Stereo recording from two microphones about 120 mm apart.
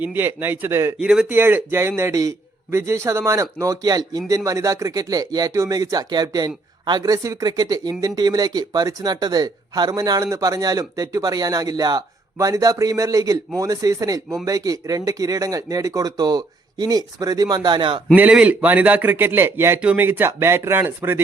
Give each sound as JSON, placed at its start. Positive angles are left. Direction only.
{"t": 0.0, "sound": "a man's voice", "side_deg": -15}
{"t": 0.9, "sound": "speech", "side_deg": -5}
{"t": 1.3, "sound": "a man's voice", "side_deg": -15}
{"t": 18.1, "sound": "a man's voice", "side_deg": -10}